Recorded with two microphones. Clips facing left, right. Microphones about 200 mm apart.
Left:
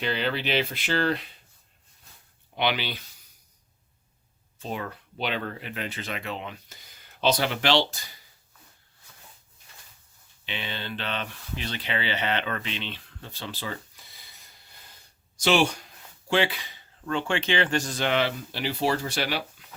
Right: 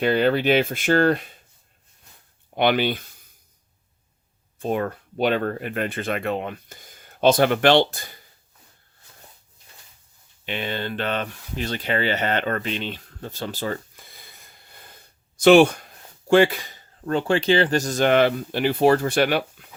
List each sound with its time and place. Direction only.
0.0 s speech: 50° right (ahead or behind)
2.6 s speech: 50° right (ahead or behind)
4.6 s speech: 50° right (ahead or behind)
10.4 s speech: 50° right (ahead or behind)
19.6 s a sound: 55° right (ahead or behind)